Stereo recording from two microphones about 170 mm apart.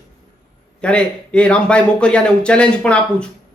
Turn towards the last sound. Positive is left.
turn(degrees=5)  # may be behind; listen again after turning